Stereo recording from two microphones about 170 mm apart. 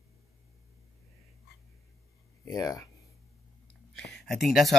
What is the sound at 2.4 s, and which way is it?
Speech, 20° left (ahead or behind).